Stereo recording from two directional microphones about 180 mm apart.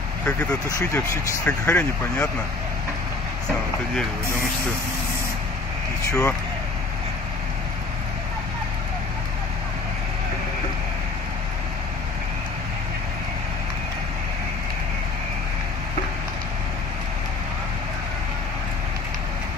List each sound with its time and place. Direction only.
0.2 s speech: 5° left (ahead or behind)
6.0 s speech: 15° left (ahead or behind)